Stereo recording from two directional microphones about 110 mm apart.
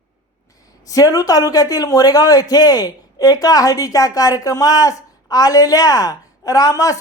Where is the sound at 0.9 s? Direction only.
35° left (ahead or behind).